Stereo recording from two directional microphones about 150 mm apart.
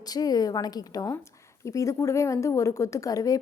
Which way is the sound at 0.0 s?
25° left (ahead or behind).